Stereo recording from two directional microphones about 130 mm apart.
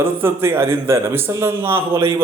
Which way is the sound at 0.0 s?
15° right (ahead or behind).